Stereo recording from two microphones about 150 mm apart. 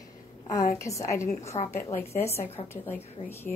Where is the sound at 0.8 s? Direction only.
20° left (ahead or behind).